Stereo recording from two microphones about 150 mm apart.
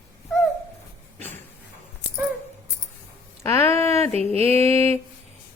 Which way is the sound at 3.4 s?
20° left (ahead or behind).